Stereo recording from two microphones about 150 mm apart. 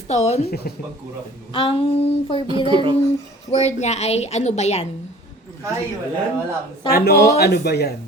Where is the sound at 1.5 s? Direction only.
35° left (ahead or behind).